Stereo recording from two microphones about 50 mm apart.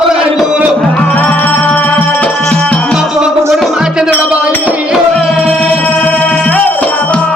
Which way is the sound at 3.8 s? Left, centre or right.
Centre.